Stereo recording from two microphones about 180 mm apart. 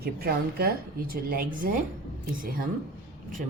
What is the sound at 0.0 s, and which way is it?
Speech, 55° right (ahead or behind).